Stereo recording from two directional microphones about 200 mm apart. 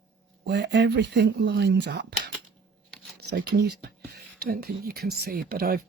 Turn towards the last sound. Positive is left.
turn(degrees=-50)  # may be behind; listen again after turning